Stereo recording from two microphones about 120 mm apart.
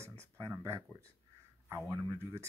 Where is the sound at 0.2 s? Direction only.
25° right (ahead or behind).